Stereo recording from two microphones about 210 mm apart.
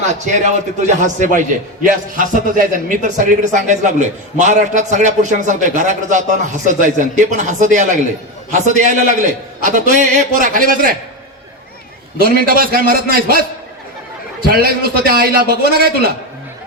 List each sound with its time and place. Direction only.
0.3 s a man's voice: 35° right (ahead or behind)
12.2 s a man's voice: 45° right (ahead or behind)
14.4 s a man's voice: 45° right (ahead or behind)